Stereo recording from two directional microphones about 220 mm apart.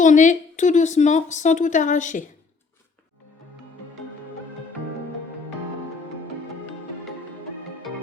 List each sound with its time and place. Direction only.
0.0 s a woman's voice: 35° left (ahead or behind)